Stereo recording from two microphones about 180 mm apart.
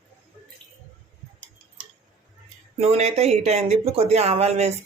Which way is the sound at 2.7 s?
35° right (ahead or behind).